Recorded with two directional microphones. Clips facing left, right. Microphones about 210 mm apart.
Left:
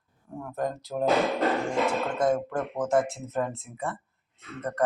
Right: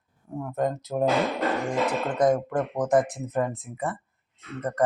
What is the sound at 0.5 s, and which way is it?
Speech, 20° right (ahead or behind).